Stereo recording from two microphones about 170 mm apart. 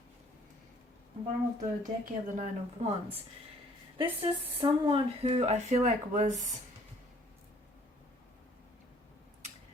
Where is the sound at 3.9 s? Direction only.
30° right (ahead or behind).